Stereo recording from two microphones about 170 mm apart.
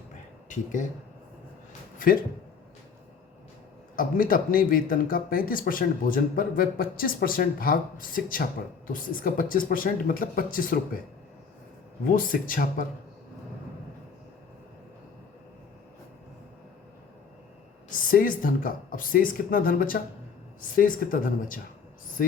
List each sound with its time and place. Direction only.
0.4 s speech: 50° left (ahead or behind)
3.9 s speech: 55° left (ahead or behind)
12.1 s speech: 55° left (ahead or behind)
17.8 s speech: 55° left (ahead or behind)